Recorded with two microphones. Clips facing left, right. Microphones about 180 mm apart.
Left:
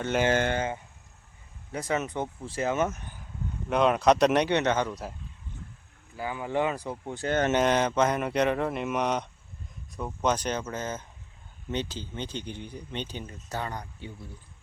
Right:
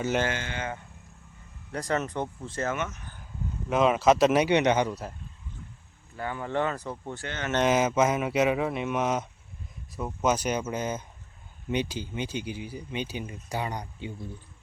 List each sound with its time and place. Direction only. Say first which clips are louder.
0.3 s speech: left 10 dB; 50° left (ahead or behind)
1.7 s speech: even; 5° left (ahead or behind)
2.7 s speech: left 6 dB; 40° left (ahead or behind)
3.7 s speech: even; centre (ahead or behind)
6.1 s speech: left 1 dB; 10° left (ahead or behind)
7.3 s speech: left 10 dB; 40° left (ahead or behind)
7.6 s speech: right 1 dB; 5° right (ahead or behind)